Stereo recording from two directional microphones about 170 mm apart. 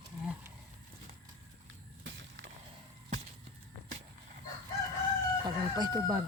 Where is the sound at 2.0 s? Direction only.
90° right.